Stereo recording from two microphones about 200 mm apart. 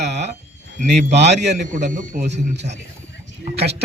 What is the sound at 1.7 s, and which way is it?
Speech, 40° right (ahead or behind).